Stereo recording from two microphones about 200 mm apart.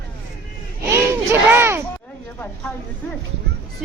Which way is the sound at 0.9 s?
10° right (ahead or behind).